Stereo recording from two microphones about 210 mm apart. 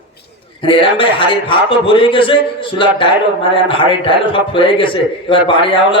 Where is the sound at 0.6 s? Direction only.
25° left (ahead or behind).